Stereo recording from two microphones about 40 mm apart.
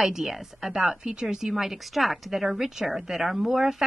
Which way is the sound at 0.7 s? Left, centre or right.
Centre.